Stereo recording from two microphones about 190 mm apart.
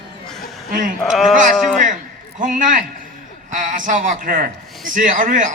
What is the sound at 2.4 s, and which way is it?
A man's voice, 45° right (ahead or behind).